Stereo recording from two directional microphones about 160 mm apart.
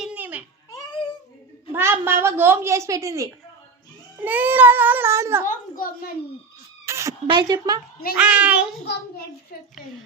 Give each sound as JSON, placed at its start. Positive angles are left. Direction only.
{"t": 0.0, "sound": "baby cry", "side_deg": -10}
{"t": 1.7, "sound": "a woman's voice", "side_deg": -15}
{"t": 5.5, "sound": "a woman's voice", "side_deg": 60}
{"t": 6.8, "sound": "a sound", "side_deg": -15}
{"t": 7.3, "sound": "speech", "side_deg": -30}
{"t": 8.1, "sound": "speech", "side_deg": -5}